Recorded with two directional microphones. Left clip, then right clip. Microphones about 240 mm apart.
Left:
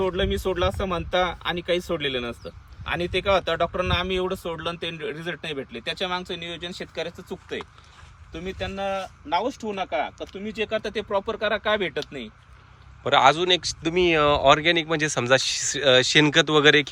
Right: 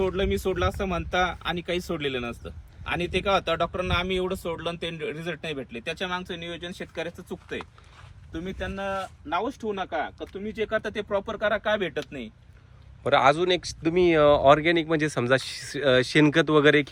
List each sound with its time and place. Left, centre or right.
0.0 s speech: centre
13.0 s speech: centre